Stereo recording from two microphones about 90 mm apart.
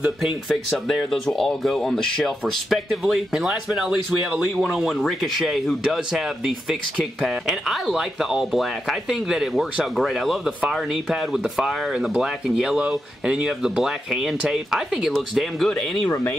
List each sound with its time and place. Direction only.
0.0 s speech: centre (ahead or behind)